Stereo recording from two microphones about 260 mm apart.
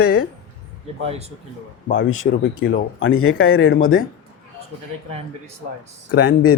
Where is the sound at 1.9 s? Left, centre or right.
Left.